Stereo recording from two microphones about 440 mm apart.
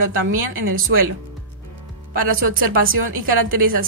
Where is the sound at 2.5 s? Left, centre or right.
Right.